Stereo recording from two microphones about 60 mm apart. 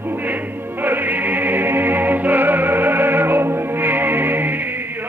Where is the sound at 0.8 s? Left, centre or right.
Right.